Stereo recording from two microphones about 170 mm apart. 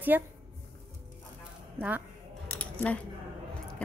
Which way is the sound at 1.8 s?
10° right (ahead or behind).